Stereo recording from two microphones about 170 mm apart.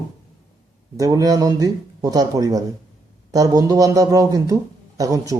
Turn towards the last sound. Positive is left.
turn(degrees=-20)  # may be behind; listen again after turning